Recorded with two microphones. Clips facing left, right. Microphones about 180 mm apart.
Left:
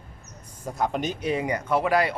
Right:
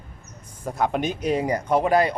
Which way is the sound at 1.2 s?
40° right (ahead or behind).